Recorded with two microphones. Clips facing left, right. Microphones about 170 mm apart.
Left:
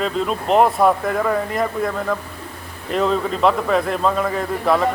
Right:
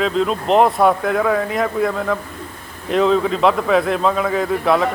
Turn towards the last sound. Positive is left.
turn(degrees=0)  # may be behind; listen again after turning